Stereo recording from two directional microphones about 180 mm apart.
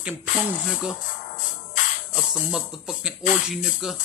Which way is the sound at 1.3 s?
45° left (ahead or behind).